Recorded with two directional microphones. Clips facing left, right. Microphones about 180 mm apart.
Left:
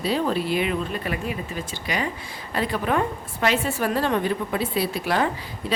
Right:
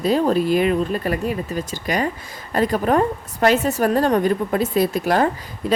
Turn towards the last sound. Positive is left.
turn(degrees=-45)  # may be behind; listen again after turning